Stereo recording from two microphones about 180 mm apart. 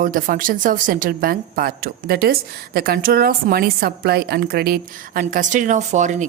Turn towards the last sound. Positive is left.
turn(degrees=-40)  # may be behind; listen again after turning